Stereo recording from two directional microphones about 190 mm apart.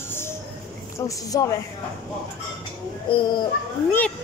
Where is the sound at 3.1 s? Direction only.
25° left (ahead or behind).